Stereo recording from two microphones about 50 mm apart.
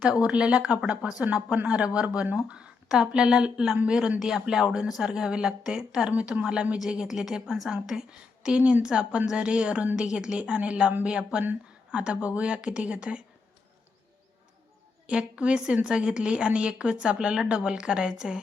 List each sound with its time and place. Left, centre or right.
0.1 s a woman's voice: right
6.1 s a woman's voice: right
8.4 s a woman's voice: right
15.0 s a woman's voice: centre